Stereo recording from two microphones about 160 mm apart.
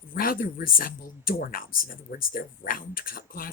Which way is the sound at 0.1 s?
60° left (ahead or behind).